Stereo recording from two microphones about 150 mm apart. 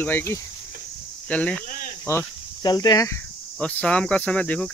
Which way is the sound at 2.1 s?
20° left (ahead or behind).